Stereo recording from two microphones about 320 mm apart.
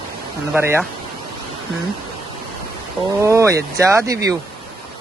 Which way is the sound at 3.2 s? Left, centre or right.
Centre.